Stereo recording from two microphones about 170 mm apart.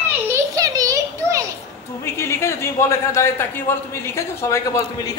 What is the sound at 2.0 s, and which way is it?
Speech, 15° left (ahead or behind).